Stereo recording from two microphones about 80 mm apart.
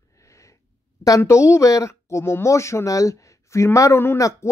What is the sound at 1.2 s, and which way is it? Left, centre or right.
Speech, left.